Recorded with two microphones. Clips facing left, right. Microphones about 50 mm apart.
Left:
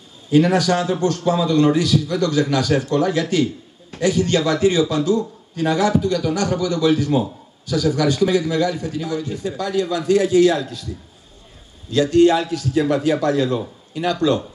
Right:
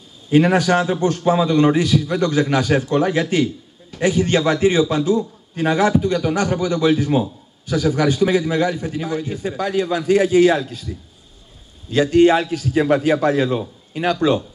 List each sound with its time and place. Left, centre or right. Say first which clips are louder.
0.3 s a man's voice: right 1 dB; right
11.9 s a man's voice: right 1 dB; right